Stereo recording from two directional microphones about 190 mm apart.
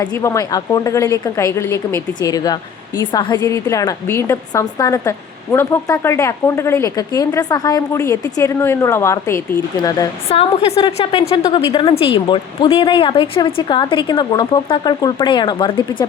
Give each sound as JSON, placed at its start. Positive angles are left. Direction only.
{"t": 0.0, "sound": "a woman's voice", "side_deg": 20}
{"t": 10.2, "sound": "a woman's voice", "side_deg": 30}